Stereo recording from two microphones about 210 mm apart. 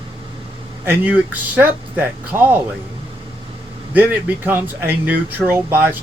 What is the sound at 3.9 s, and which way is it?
Speech, 10° right (ahead or behind).